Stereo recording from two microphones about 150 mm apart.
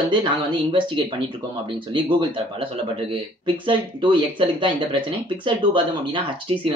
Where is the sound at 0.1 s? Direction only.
30° right (ahead or behind).